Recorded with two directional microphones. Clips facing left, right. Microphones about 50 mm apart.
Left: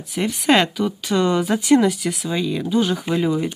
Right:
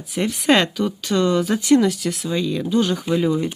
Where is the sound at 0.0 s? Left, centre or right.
Centre.